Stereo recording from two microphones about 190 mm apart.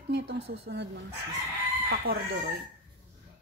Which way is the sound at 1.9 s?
55° right (ahead or behind).